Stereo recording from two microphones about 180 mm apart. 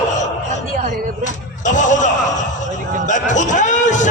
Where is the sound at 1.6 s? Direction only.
45° left (ahead or behind).